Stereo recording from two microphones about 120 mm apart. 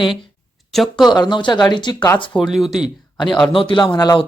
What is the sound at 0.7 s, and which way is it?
Speech, centre (ahead or behind).